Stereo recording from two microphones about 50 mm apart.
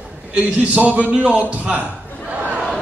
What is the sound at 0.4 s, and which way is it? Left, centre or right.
A man's voice, right.